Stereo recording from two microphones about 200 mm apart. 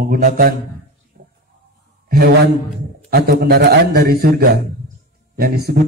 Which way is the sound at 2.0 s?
50° right (ahead or behind).